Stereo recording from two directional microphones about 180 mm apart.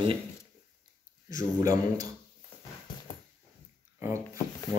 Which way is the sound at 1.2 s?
20° right (ahead or behind).